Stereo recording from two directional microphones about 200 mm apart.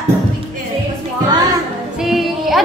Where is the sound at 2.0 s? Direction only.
Centre (ahead or behind).